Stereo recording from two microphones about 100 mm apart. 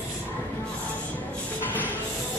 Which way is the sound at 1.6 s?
15° left (ahead or behind).